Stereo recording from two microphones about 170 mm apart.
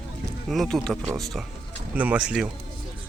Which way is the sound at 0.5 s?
Centre (ahead or behind).